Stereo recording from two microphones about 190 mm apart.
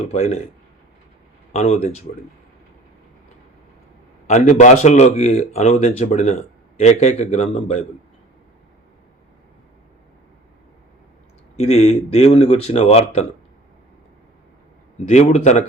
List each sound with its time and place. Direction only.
0.1 s speech: 35° left (ahead or behind)
1.5 s speech: 35° left (ahead or behind)
4.3 s speech: 35° left (ahead or behind)
11.5 s speech: 35° left (ahead or behind)
15.1 s speech: 35° left (ahead or behind)